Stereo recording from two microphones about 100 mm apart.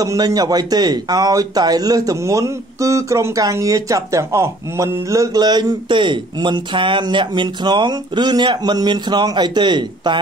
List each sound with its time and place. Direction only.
0.0 s speech: 35° right (ahead or behind)